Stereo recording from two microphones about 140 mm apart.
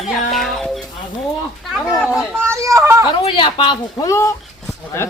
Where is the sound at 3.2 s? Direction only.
40° left (ahead or behind); by 4.3 s 20° left (ahead or behind).